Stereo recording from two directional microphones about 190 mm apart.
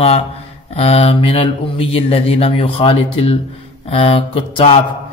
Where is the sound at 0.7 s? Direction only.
30° left (ahead or behind).